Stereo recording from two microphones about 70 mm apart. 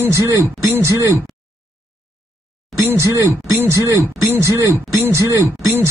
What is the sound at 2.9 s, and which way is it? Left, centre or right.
Speech, right.